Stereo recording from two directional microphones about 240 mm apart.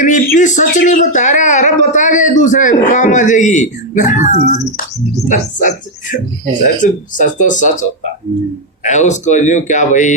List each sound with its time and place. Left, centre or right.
0.0 s speech: left